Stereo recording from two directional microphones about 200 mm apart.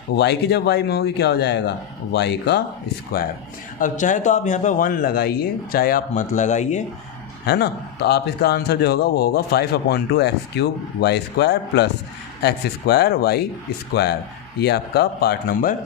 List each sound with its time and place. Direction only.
0.2 s a man's voice: 55° left (ahead or behind); by 6.8 s 35° left (ahead or behind)
7.4 s a man's voice: 55° left (ahead or behind)